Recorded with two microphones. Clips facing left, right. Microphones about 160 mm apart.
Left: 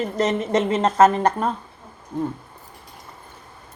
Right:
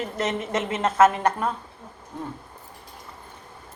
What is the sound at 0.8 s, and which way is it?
Speech, 35° left (ahead or behind).